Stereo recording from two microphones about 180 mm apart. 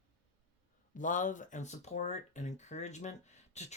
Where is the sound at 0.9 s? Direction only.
45° left (ahead or behind).